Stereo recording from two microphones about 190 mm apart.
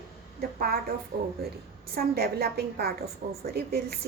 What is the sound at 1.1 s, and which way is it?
A woman's voice, 50° right (ahead or behind).